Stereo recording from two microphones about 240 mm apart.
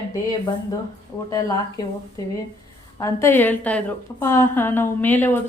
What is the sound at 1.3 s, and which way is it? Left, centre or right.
Speech, centre.